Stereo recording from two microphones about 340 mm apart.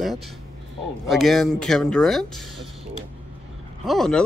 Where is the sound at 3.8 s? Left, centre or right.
Centre.